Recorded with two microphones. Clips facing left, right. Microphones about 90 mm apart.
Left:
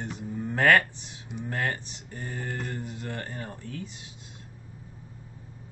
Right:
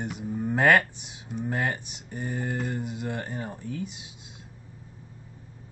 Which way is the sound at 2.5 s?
15° right (ahead or behind).